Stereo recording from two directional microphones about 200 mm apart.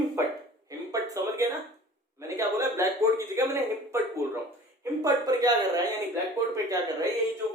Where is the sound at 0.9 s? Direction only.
15° right (ahead or behind).